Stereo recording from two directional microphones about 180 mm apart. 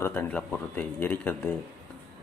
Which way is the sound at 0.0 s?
10° left (ahead or behind).